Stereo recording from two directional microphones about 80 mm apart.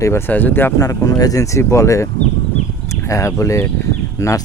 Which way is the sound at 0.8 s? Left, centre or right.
Left.